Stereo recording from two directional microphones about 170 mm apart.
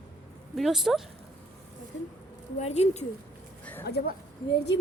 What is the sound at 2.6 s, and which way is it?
Speech, 40° left (ahead or behind).